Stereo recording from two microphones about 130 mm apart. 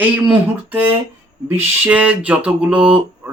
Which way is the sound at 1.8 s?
10° right (ahead or behind).